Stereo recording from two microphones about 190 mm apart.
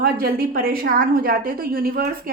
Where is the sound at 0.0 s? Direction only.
50° right (ahead or behind).